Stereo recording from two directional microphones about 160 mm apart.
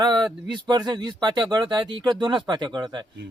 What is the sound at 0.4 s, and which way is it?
Speech, 30° right (ahead or behind).